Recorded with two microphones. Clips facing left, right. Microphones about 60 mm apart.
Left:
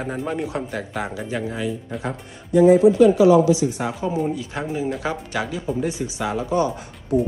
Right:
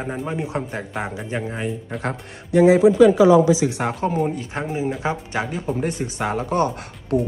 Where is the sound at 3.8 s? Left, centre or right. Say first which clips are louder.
Right 2 dB; right.